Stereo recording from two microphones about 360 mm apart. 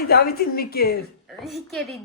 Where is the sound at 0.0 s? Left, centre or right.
Left.